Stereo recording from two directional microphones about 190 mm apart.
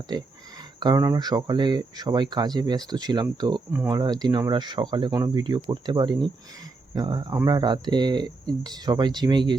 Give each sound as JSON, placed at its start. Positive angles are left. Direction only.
{"t": 0.8, "sound": "speech", "side_deg": -20}